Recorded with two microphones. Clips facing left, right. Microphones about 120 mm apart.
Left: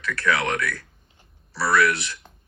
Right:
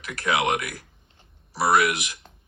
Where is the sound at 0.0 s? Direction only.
15° right (ahead or behind).